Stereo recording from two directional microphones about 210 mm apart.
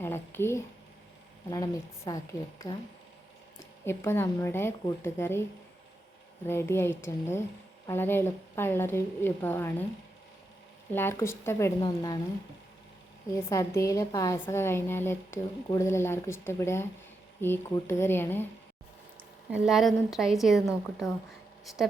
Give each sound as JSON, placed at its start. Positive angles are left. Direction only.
{"t": 0.0, "sound": "a woman's voice", "side_deg": 10}
{"t": 3.8, "sound": "a woman's voice", "side_deg": 10}
{"t": 6.5, "sound": "a woman's voice", "side_deg": 10}
{"t": 10.9, "sound": "a woman's voice", "side_deg": 10}
{"t": 13.3, "sound": "a woman's voice", "side_deg": 15}
{"t": 19.5, "sound": "a woman's voice", "side_deg": -5}